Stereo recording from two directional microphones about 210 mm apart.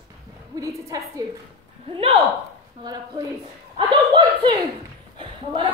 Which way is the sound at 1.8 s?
25° right (ahead or behind).